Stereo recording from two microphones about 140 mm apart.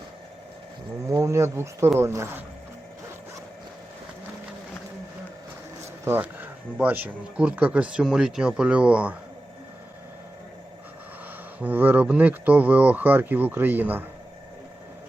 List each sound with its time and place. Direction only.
1.0 s speech: 20° right (ahead or behind)
6.1 s speech: 15° right (ahead or behind)
11.6 s speech: 15° right (ahead or behind)